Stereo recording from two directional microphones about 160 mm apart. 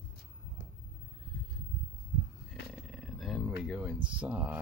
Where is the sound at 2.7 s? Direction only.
Centre (ahead or behind).